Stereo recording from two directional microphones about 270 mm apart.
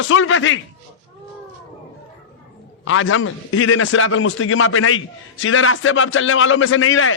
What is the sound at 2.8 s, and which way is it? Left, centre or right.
A man's voice, left.